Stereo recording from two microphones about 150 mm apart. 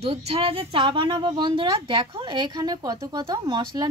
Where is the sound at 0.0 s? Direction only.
40° right (ahead or behind).